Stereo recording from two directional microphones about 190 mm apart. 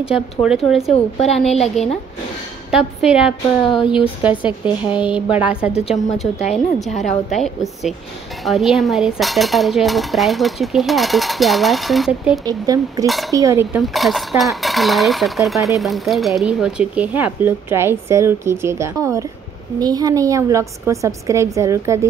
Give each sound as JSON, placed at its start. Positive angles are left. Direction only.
{"t": 0.1, "sound": "speech", "side_deg": -5}
{"t": 2.7, "sound": "a woman's voice", "side_deg": -5}
{"t": 5.8, "sound": "a woman's voice", "side_deg": 35}
{"t": 7.2, "sound": "speech", "side_deg": 0}
{"t": 12.4, "sound": "a woman's voice", "side_deg": -20}
{"t": 13.0, "sound": "speech", "side_deg": 0}
{"t": 13.3, "sound": "a woman's voice", "side_deg": -15}
{"t": 13.7, "sound": "a woman's voice", "side_deg": 0}